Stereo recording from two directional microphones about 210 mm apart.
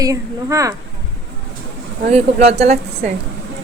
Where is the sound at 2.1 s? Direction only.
30° right (ahead or behind).